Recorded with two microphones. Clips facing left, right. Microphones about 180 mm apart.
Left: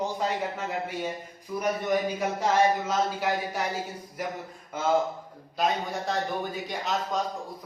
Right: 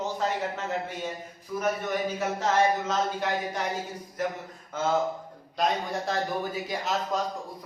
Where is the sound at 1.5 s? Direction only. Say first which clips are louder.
Left 2 dB; 15° left (ahead or behind).